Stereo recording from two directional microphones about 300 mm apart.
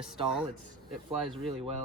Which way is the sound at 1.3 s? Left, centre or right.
Centre.